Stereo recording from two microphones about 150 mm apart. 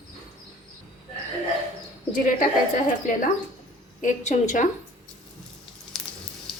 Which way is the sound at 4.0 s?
55° left (ahead or behind).